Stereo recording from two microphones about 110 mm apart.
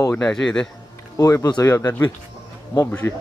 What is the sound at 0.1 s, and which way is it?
Speech, 5° left (ahead or behind).